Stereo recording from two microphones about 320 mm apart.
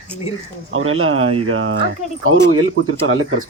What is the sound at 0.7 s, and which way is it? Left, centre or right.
Speech, right.